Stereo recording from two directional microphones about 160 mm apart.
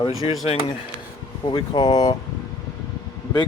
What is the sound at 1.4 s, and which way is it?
Speech, 30° left (ahead or behind).